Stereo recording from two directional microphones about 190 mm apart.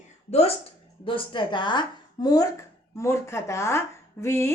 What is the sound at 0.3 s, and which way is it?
A woman's voice, 35° left (ahead or behind).